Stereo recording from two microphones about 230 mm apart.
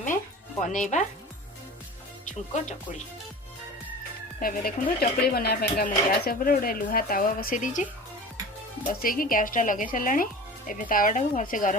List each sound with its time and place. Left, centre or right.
0.6 s speech: left
2.2 s speech: left
4.4 s speech: left
8.9 s speech: left